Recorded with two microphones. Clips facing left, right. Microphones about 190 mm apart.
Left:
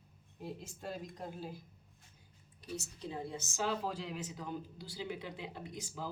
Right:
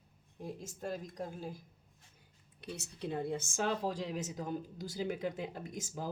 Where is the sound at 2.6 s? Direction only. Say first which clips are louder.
Right 1 dB; 65° right (ahead or behind).